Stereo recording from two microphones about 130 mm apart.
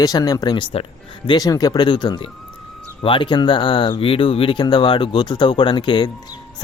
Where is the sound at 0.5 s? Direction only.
45° left (ahead or behind).